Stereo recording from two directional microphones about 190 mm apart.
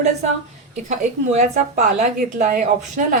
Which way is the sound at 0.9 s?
35° right (ahead or behind).